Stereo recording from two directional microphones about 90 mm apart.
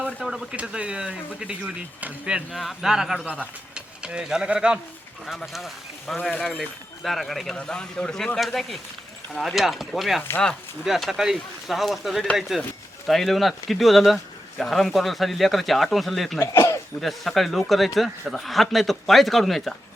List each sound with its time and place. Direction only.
0.0 s a man's voice: 5° right (ahead or behind)
16.5 s speech: 35° left (ahead or behind)
17.0 s a man's voice: centre (ahead or behind)